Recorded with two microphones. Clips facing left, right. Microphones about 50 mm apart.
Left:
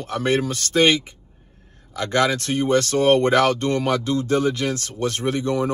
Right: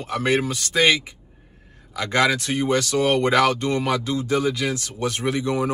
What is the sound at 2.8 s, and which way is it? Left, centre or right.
Speech, left.